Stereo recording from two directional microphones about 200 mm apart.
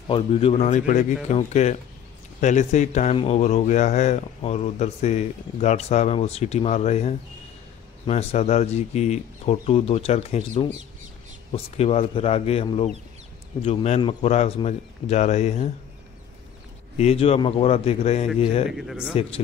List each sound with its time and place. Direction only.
0.1 s a man's voice: 30° left (ahead or behind)
16.9 s speech: 30° left (ahead or behind)
18.7 s speech: centre (ahead or behind)